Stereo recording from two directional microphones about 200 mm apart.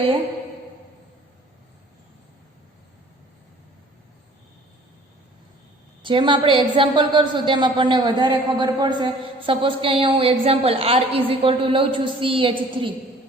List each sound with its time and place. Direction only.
6.0 s a woman's voice: 25° right (ahead or behind)